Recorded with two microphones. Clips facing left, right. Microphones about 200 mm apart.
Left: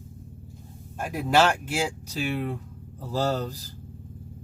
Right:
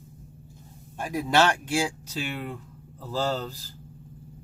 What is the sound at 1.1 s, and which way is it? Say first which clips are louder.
Speech: left 1 dB; 10° left (ahead or behind).